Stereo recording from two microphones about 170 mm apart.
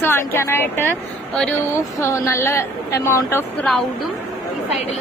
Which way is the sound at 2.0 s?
15° left (ahead or behind).